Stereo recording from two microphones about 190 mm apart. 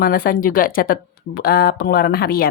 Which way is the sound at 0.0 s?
50° left (ahead or behind).